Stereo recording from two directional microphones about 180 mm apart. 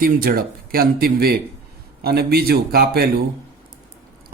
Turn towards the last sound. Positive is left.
turn(degrees=-60)  # may be behind; listen again after turning